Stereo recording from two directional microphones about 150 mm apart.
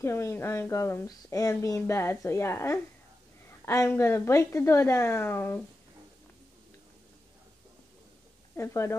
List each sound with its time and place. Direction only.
0.0 s speech: 15° left (ahead or behind)
8.5 s speech: 20° left (ahead or behind)